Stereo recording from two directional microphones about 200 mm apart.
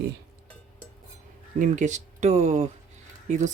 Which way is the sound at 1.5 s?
40° right (ahead or behind).